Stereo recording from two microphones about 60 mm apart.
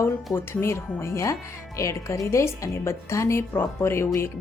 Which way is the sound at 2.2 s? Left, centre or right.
Left.